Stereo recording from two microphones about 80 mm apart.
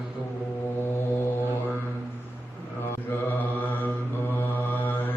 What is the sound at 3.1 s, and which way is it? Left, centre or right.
Mantra, left.